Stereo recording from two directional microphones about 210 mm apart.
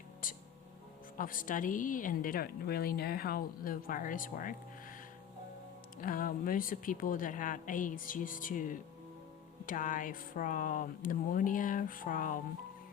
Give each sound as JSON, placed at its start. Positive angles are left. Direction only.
{"t": 0.2, "sound": "music", "side_deg": 40}
{"t": 1.1, "sound": "a woman's voice", "side_deg": 40}
{"t": 6.0, "sound": "a woman's voice", "side_deg": 40}